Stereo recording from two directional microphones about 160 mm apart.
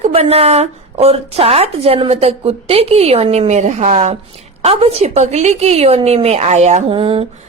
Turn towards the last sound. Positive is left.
turn(degrees=-35)  # may be behind; listen again after turning